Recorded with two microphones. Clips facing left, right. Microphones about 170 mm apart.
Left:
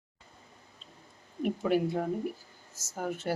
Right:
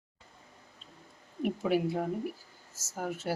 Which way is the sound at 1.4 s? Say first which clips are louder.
Left 1 dB; 5° right (ahead or behind).